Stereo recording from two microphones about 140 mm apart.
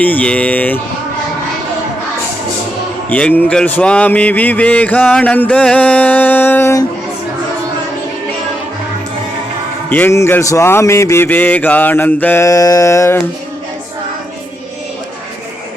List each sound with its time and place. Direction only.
0.0 s mantra: 10° left (ahead or behind)
3.1 s mantra: 10° left (ahead or behind)
9.9 s mantra: 15° left (ahead or behind)